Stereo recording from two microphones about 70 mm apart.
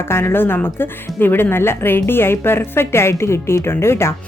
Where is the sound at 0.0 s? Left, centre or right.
Left.